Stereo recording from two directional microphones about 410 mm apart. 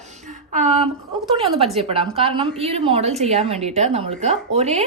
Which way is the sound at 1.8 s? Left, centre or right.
Centre.